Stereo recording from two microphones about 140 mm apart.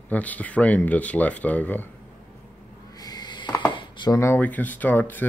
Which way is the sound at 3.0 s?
30° left (ahead or behind).